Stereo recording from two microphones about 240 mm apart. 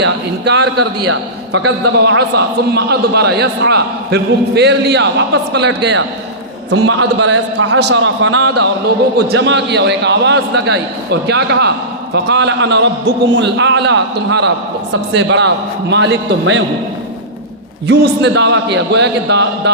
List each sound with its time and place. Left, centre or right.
0.0 s a man's voice: right
17.8 s a man's voice: right